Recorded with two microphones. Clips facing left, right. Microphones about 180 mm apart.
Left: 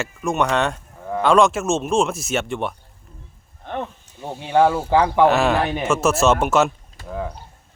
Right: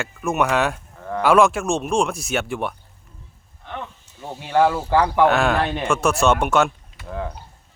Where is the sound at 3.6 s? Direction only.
45° left (ahead or behind).